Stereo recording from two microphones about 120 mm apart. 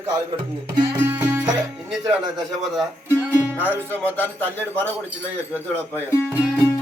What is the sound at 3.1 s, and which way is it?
Music, 15° right (ahead or behind).